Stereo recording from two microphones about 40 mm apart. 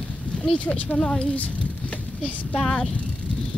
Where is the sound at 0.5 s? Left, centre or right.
Left.